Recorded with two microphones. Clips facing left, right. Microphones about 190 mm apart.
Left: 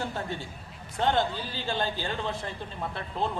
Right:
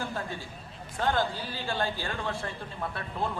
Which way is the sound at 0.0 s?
25° left (ahead or behind).